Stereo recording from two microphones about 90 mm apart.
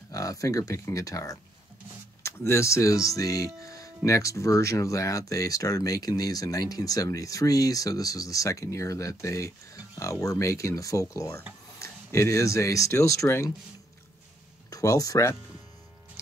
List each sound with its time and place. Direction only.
0.1 s speech: 40° left (ahead or behind)
14.7 s speech: 40° left (ahead or behind)